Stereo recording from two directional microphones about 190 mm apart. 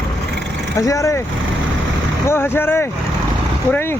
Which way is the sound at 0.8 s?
15° left (ahead or behind).